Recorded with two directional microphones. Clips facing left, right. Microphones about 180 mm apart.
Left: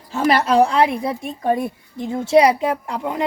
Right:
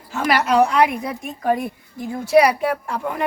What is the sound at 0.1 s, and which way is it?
A woman's voice, 30° left (ahead or behind).